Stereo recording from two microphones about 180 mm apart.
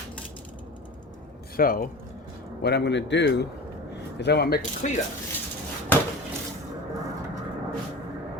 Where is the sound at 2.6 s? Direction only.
65° left (ahead or behind).